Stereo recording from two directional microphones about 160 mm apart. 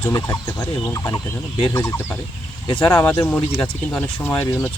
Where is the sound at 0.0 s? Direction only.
20° left (ahead or behind).